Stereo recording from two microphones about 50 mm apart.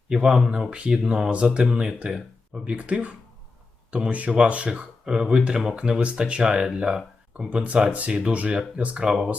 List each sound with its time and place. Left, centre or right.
0.1 s speech: centre
7.5 s speech: right